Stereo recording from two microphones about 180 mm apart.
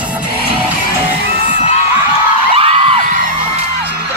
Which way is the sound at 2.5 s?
30° right (ahead or behind).